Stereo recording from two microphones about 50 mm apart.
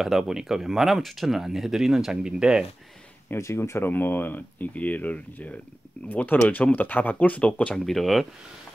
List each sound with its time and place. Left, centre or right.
0.0 s speech: centre
3.3 s speech: left
3.9 s speech: left
7.7 s speech: centre